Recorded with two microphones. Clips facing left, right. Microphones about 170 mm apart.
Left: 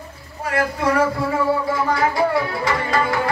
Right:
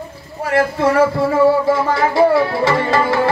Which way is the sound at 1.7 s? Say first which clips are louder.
Right 4 dB; 25° right (ahead or behind).